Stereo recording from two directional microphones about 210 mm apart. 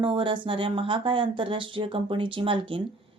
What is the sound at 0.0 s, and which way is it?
A woman's voice, 25° right (ahead or behind).